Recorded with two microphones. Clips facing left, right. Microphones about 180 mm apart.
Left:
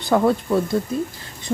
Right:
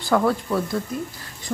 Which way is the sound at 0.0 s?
25° left (ahead or behind).